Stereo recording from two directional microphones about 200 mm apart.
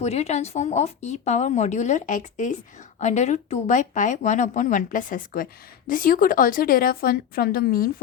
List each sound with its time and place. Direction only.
0.0 s a woman's voice: 35° left (ahead or behind)